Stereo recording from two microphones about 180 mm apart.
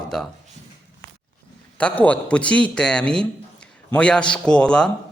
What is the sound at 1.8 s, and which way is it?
A man's voice, 5° left (ahead or behind).